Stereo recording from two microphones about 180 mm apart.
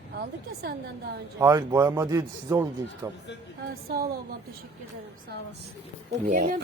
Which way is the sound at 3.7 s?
60° right (ahead or behind).